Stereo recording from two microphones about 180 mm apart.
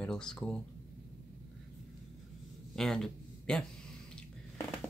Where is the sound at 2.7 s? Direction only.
Centre (ahead or behind).